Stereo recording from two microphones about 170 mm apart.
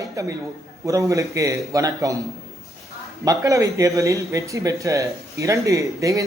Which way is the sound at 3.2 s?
20° right (ahead or behind).